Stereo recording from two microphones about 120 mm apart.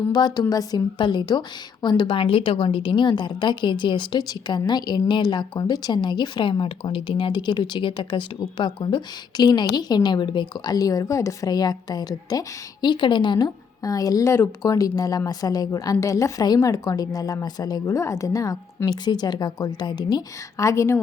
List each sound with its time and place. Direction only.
0.1 s a woman's voice: 35° left (ahead or behind)